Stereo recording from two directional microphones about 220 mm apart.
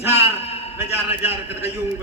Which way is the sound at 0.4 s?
30° left (ahead or behind).